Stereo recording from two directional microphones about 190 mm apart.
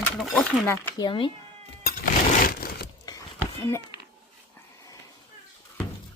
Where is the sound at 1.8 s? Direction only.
50° left (ahead or behind).